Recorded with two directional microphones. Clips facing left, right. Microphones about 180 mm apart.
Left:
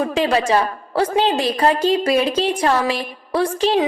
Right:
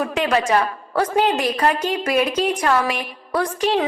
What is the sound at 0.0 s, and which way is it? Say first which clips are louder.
A woman's voice: left 2 dB; 30° left (ahead or behind).